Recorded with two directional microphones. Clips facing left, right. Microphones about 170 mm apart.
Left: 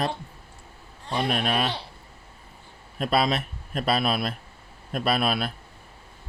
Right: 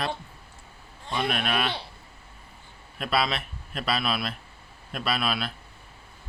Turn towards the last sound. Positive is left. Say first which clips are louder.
# left 4 dB
turn(degrees=50)  # may be behind; listen again after turning